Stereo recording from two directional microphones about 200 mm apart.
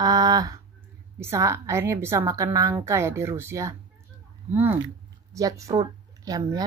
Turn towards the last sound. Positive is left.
turn(degrees=-20)  # may be behind; listen again after turning